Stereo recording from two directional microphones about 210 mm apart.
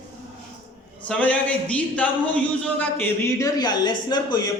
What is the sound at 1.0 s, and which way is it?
A man's voice, 5° left (ahead or behind).